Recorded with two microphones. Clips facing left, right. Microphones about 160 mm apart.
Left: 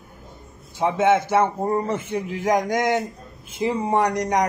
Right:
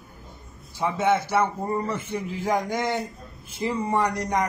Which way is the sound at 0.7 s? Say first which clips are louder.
Left 4 dB; 20° left (ahead or behind).